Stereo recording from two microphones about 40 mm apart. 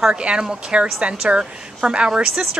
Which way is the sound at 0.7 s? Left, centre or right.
Right.